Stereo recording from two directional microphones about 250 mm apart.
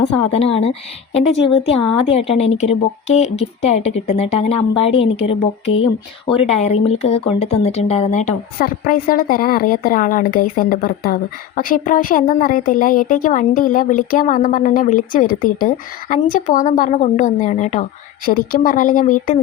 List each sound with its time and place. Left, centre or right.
0.0 s a woman's voice: left